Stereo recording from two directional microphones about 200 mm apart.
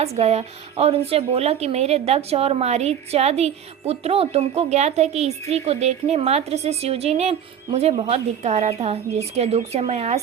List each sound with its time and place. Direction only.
0.0 s speech: 30° right (ahead or behind)